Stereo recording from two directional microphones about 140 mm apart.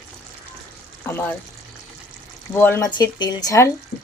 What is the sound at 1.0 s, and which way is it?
Frying, 15° left (ahead or behind).